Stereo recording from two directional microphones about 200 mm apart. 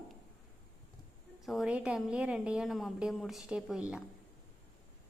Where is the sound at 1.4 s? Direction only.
Centre (ahead or behind).